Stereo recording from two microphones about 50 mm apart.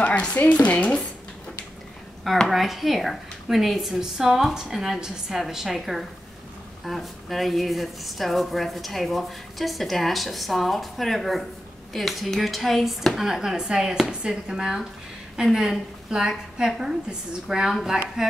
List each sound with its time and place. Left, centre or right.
0.0 s speech: left
2.5 s a woman's voice: centre